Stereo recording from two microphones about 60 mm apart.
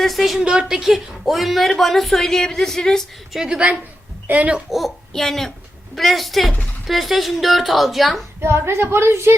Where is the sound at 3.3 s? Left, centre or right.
Centre.